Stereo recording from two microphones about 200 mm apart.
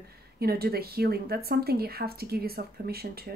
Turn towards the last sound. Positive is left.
turn(degrees=-50)  # may be behind; listen again after turning